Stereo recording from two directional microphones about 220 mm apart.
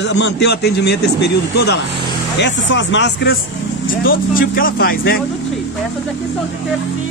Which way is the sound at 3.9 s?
40° left (ahead or behind).